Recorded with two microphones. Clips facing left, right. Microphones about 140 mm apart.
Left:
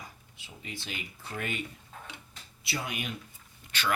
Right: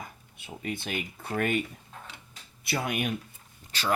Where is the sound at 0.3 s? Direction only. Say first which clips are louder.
Right 9 dB; 55° right (ahead or behind).